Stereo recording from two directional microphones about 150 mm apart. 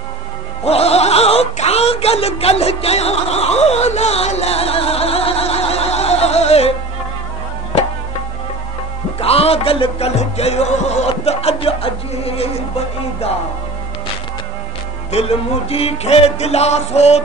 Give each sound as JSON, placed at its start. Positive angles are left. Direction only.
{"t": 0.7, "sound": "a sound", "side_deg": 45}
{"t": 9.2, "sound": "music", "side_deg": 40}
{"t": 15.0, "sound": "music", "side_deg": 45}